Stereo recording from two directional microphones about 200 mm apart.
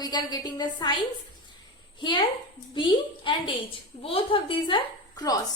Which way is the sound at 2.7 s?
25° left (ahead or behind).